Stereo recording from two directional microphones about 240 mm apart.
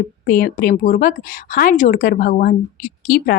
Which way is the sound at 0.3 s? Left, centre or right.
Left.